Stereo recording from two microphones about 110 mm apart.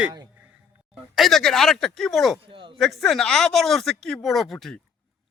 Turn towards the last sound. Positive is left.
turn(degrees=5)  # may be behind; listen again after turning